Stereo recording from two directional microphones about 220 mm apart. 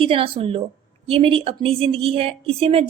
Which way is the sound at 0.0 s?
25° right (ahead or behind).